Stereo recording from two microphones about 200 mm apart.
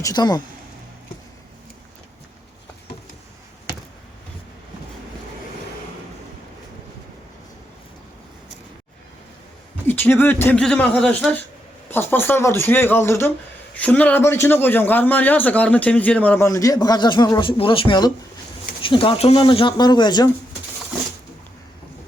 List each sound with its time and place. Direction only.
0.0 s speech: 20° left (ahead or behind)
9.8 s a man's voice: 10° left (ahead or behind)